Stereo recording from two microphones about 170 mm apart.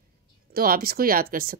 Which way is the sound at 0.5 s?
60° right (ahead or behind).